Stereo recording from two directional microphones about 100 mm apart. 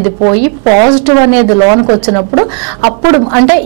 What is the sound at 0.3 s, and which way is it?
A woman's voice, 15° right (ahead or behind).